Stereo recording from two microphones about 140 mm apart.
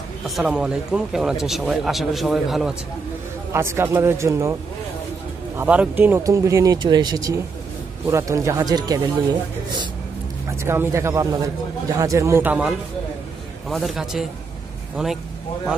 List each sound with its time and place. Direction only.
0.4 s speech: 5° right (ahead or behind)
3.5 s speech: 20° right (ahead or behind)
5.6 s speech: 10° right (ahead or behind); by 9.8 s 30° right (ahead or behind)
10.5 s speech: 20° right (ahead or behind)